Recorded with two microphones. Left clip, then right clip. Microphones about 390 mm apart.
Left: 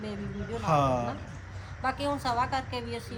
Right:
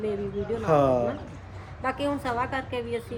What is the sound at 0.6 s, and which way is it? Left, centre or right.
A man's voice, centre.